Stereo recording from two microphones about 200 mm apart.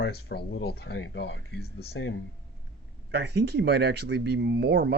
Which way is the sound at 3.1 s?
55° right (ahead or behind).